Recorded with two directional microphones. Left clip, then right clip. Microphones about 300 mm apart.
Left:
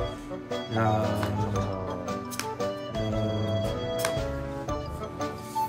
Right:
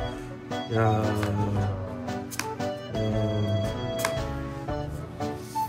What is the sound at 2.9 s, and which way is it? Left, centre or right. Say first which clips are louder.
Music: right 3 dB; centre.